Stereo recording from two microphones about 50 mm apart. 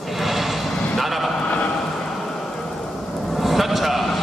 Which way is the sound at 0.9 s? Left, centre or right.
Centre.